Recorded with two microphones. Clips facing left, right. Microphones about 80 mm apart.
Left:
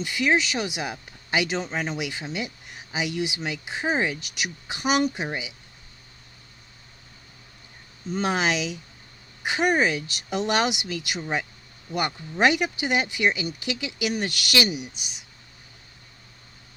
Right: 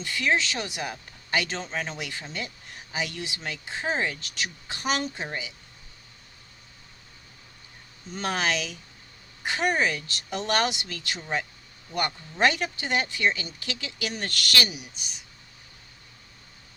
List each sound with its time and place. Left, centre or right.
0.0 s speech: centre
8.1 s speech: centre